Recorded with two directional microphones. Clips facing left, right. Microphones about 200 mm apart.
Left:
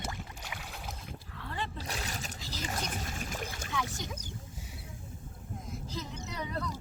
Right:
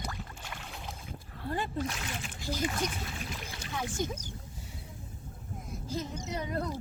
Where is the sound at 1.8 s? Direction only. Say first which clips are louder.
Right 4 dB; 40° left (ahead or behind).